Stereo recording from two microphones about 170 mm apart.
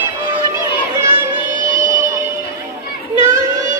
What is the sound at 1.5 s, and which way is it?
Music, 50° right (ahead or behind).